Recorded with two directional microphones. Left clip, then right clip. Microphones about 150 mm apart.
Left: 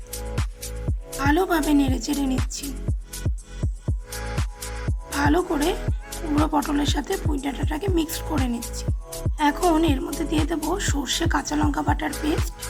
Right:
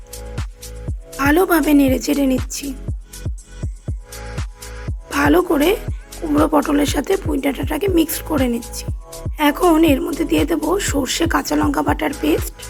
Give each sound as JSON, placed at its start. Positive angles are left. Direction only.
{"t": 1.1, "sound": "speech", "side_deg": -35}
{"t": 2.9, "sound": "music", "side_deg": 0}
{"t": 4.4, "sound": "music", "side_deg": 0}
{"t": 5.0, "sound": "speech", "side_deg": -35}
{"t": 5.8, "sound": "music", "side_deg": 0}
{"t": 6.4, "sound": "speech", "side_deg": -30}